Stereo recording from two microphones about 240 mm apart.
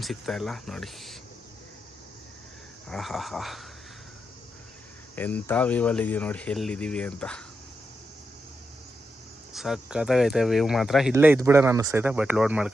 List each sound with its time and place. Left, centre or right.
0.0 s speech: centre
2.9 s speech: centre
5.1 s speech: centre
9.5 s speech: centre